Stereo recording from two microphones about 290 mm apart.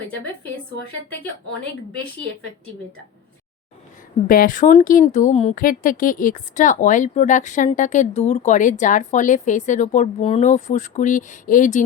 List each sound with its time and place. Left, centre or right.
4.3 s speech: left